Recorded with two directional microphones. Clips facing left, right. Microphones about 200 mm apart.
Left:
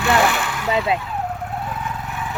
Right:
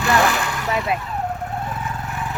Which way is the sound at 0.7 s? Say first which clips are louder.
Left 3 dB; 25° left (ahead or behind).